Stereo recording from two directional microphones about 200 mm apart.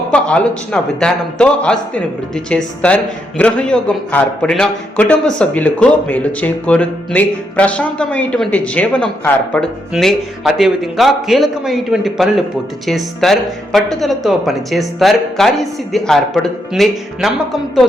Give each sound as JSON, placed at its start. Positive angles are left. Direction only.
{"t": 0.1, "sound": "a man's voice", "side_deg": 5}